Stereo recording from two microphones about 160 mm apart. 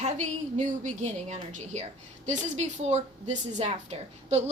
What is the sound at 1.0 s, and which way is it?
A woman's voice, 45° right (ahead or behind).